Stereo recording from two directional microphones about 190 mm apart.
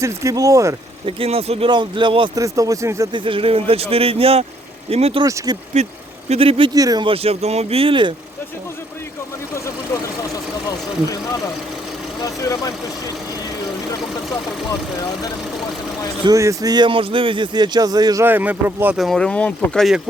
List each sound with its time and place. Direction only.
0.0 s speech: 15° right (ahead or behind)
1.0 s speech: 30° right (ahead or behind)
5.2 s speech: 20° right (ahead or behind)
5.7 s speech: 35° right (ahead or behind)
9.9 s speech: 15° left (ahead or behind)
12.2 s speech: 20° left (ahead or behind)
16.2 s speech: 15° right (ahead or behind); by 20.0 s centre (ahead or behind)